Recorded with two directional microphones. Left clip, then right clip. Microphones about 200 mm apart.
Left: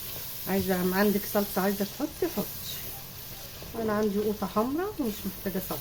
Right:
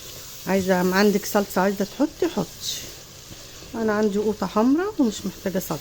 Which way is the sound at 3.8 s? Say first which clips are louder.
Right 6 dB; 55° right (ahead or behind).